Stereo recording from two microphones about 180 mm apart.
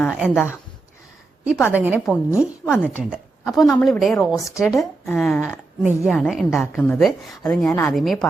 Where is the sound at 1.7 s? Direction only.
10° right (ahead or behind).